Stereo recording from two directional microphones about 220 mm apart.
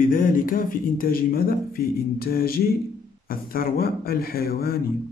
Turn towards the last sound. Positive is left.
turn(degrees=45)  # may be behind; listen again after turning